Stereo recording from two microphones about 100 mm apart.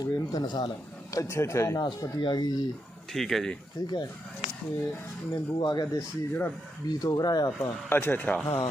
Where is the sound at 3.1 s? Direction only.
5° left (ahead or behind).